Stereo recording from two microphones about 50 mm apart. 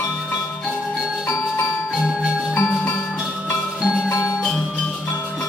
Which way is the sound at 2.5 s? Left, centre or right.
Left.